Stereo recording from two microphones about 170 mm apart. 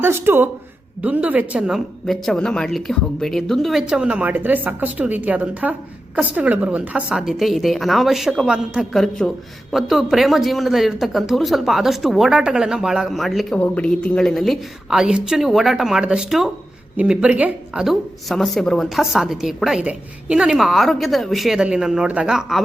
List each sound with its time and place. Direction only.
0.0 s a woman's voice: 15° right (ahead or behind)